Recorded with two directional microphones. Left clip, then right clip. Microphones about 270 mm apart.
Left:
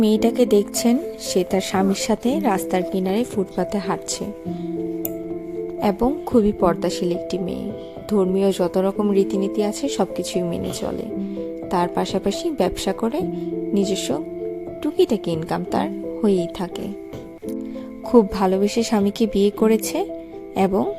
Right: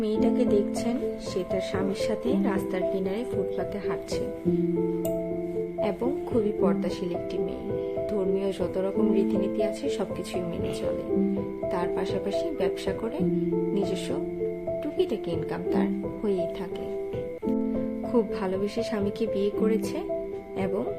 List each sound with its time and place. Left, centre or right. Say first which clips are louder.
0.0 s a woman's voice: left 7 dB; left
5.8 s a woman's voice: left 8 dB; left
11.7 s a woman's voice: left 8 dB; left
18.1 s a woman's voice: left 11 dB; left